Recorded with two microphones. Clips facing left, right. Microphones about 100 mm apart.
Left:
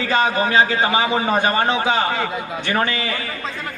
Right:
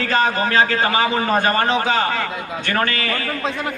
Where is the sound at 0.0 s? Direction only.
15° left (ahead or behind).